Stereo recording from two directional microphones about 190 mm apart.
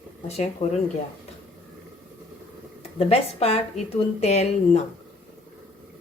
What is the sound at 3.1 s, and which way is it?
A woman's voice, 30° left (ahead or behind).